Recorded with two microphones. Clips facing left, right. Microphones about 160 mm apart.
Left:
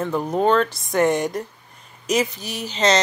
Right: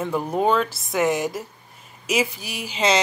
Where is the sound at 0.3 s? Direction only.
5° right (ahead or behind).